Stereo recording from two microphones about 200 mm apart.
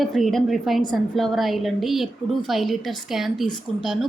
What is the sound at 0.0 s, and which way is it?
A woman's voice, centre (ahead or behind).